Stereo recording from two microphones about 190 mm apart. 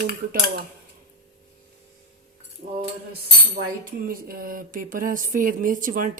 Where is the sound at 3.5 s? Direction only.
50° right (ahead or behind).